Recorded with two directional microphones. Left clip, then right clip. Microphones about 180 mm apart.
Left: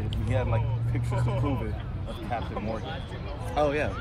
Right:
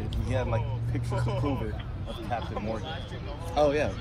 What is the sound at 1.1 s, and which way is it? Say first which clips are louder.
Speech: even; 20° right (ahead or behind).